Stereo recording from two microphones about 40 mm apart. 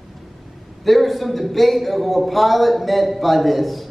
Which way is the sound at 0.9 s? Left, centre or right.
Centre.